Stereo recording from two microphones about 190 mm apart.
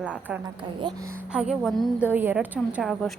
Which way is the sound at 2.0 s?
10° right (ahead or behind).